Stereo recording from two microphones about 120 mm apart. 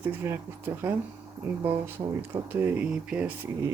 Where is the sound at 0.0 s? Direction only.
20° right (ahead or behind).